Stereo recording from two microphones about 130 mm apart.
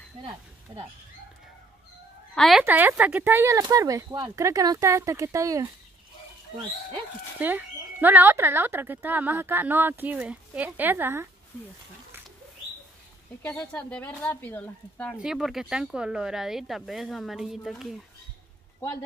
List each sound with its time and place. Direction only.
2.3 s speech: centre (ahead or behind)
2.6 s speech: 15° right (ahead or behind)
7.3 s speech: 15° right (ahead or behind)
13.4 s speech: 15° left (ahead or behind)
15.1 s speech: 5° right (ahead or behind)